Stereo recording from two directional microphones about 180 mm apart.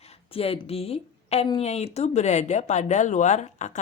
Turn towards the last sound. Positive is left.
turn(degrees=40)  # may be behind; listen again after turning